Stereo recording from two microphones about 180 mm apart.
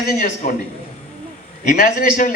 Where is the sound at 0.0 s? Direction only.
50° left (ahead or behind).